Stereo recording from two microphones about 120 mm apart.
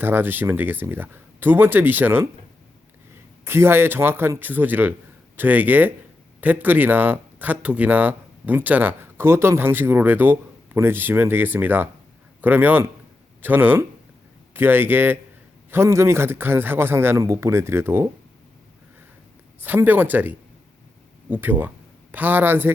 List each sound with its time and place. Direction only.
0.0 s speech: 15° right (ahead or behind)
3.4 s a man's voice: 20° right (ahead or behind)
19.5 s speech: 15° right (ahead or behind)